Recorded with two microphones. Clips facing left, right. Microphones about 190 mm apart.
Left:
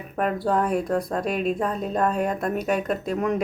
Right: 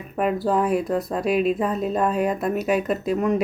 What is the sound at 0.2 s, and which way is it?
A woman's voice, 5° right (ahead or behind).